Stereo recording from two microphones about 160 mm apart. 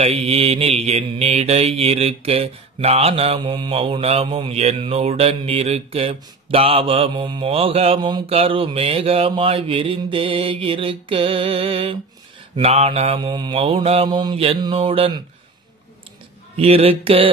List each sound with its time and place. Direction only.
0.0 s mantra: 35° right (ahead or behind)
16.5 s mantra: 40° right (ahead or behind)